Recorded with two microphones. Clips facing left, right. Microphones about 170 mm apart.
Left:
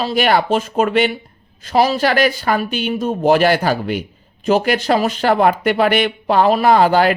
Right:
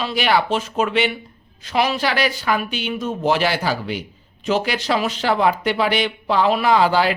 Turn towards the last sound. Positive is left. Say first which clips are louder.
# left 4 dB
turn(degrees=50)  # may be behind; listen again after turning